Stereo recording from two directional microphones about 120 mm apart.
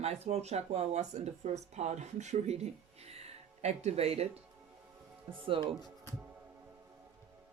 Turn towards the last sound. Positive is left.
turn(degrees=-45)  # may be behind; listen again after turning